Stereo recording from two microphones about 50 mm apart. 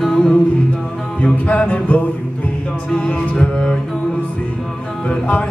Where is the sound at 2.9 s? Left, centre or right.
Centre.